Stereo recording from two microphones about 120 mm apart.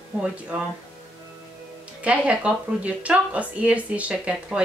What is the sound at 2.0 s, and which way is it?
A woman's voice, 10° right (ahead or behind).